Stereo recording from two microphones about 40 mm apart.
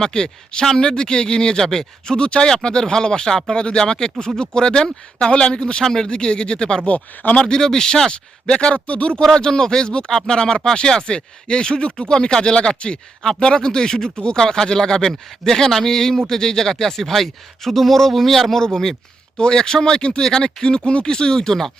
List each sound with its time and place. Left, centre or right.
0.0 s speech: centre
5.8 s a man's voice: centre
6.1 s speech: left
6.8 s speech: left
7.3 s a man's voice: centre
8.1 s speech: left
9.2 s a man's voice: centre